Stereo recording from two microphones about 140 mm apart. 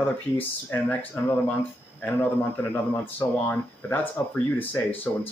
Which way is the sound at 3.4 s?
15° left (ahead or behind).